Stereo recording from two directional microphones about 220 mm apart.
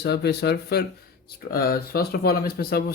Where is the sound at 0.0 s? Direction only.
50° left (ahead or behind).